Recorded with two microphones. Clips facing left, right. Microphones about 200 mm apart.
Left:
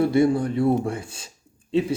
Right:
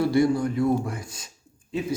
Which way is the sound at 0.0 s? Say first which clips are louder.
Left 2 dB; 25° left (ahead or behind).